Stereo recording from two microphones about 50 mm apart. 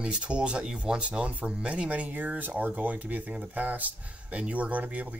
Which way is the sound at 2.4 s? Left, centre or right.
Right.